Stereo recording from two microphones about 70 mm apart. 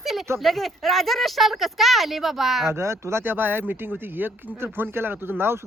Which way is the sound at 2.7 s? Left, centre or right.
Right.